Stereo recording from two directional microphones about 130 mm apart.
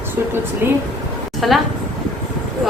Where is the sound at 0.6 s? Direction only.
20° right (ahead or behind).